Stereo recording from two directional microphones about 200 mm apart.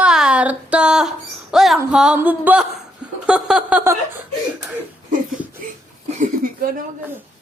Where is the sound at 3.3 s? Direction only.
5° right (ahead or behind).